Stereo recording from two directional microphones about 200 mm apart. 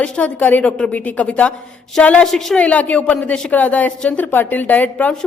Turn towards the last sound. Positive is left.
turn(degrees=5)  # may be behind; listen again after turning